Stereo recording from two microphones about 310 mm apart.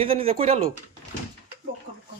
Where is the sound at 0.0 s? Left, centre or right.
Centre.